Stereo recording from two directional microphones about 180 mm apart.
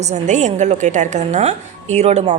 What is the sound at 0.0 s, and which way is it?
A woman's voice, 40° right (ahead or behind).